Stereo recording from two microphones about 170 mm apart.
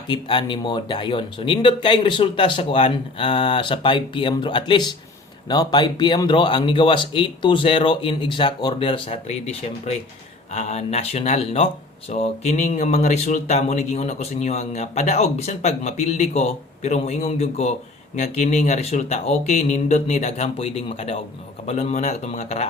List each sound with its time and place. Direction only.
0.1 s speech: 30° left (ahead or behind)